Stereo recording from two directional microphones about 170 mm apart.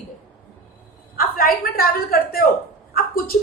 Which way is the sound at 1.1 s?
55° left (ahead or behind).